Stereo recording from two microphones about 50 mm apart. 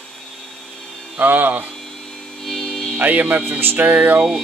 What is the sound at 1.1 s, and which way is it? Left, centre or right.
Speech, right.